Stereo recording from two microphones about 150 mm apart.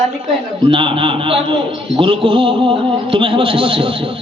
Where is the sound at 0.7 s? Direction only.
35° right (ahead or behind).